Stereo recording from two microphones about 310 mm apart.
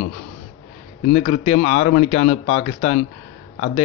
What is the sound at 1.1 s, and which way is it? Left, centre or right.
Speech, centre.